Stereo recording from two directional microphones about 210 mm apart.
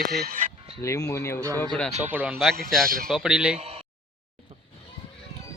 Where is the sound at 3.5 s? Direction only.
30° right (ahead or behind).